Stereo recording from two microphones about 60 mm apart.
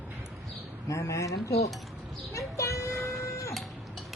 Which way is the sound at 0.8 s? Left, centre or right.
Left.